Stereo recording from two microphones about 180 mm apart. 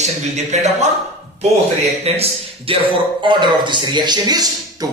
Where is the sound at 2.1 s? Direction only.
35° right (ahead or behind).